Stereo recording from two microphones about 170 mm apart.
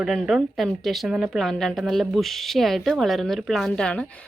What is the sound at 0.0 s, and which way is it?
A woman's voice, centre (ahead or behind).